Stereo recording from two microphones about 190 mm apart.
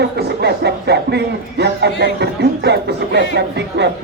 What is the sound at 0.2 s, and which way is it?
A man's voice, 60° right (ahead or behind).